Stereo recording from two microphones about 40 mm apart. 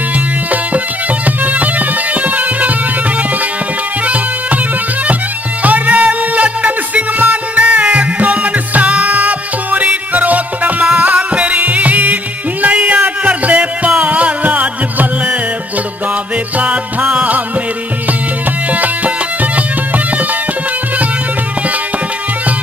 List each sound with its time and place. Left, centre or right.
0.5 s bagpipes: right
4.0 s music: right
5.6 s music: right
18.7 s music: right